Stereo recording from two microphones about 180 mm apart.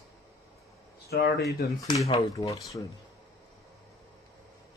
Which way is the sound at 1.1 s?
65° left (ahead or behind).